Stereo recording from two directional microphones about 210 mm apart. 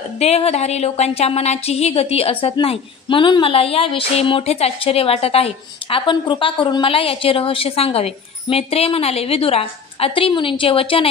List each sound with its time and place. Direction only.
0.2 s a woman's voice: 30° left (ahead or behind)